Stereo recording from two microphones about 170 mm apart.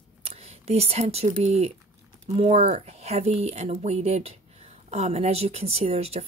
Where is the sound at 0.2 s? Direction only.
35° right (ahead or behind).